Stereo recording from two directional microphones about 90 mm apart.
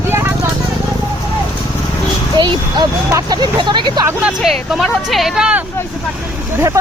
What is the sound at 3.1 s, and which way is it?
Vehicle, 50° right (ahead or behind).